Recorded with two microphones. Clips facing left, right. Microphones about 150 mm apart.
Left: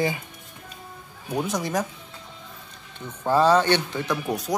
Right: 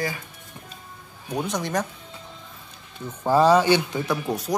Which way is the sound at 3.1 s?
10° right (ahead or behind).